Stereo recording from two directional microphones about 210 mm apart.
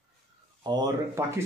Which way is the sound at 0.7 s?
15° right (ahead or behind).